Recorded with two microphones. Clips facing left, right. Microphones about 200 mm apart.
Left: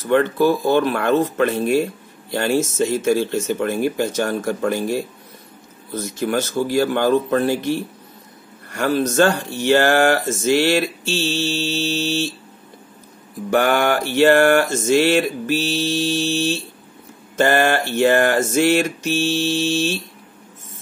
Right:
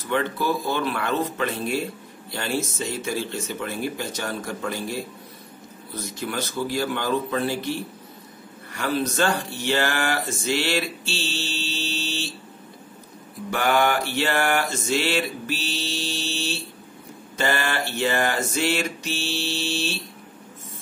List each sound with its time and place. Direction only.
0.1 s mantra: 50° left (ahead or behind)
8.7 s mantra: 45° left (ahead or behind)
13.5 s mantra: 50° left (ahead or behind)
17.4 s mantra: 50° left (ahead or behind)